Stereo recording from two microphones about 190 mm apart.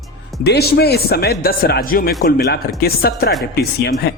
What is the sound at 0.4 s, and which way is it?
A man's voice, 60° left (ahead or behind).